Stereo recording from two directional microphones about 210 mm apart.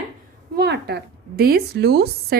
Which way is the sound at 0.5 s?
50° right (ahead or behind).